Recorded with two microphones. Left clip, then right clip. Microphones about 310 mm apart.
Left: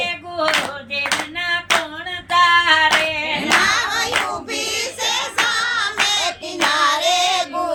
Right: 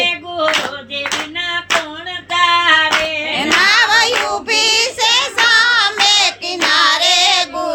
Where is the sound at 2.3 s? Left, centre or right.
Centre.